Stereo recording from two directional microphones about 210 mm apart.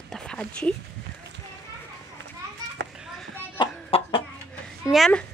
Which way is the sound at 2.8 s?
55° right (ahead or behind).